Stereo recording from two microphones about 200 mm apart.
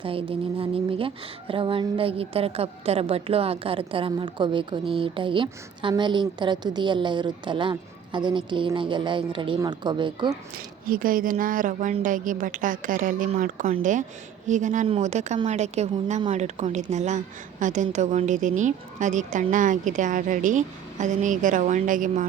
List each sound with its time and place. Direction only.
0.0 s speech: 25° right (ahead or behind)
10.8 s a woman's voice: 45° right (ahead or behind)